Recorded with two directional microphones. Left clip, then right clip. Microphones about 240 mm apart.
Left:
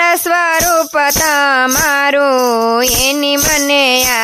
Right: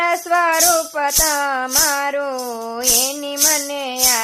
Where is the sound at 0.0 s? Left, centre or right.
Left.